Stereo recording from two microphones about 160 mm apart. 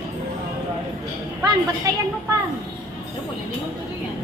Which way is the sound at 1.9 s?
20° right (ahead or behind).